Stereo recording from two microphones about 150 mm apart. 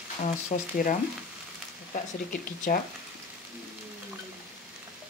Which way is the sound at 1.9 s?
70° left (ahead or behind).